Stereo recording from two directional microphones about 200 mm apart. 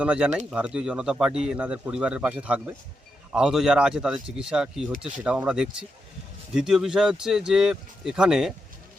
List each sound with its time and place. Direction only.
0.0 s speech: 5° right (ahead or behind)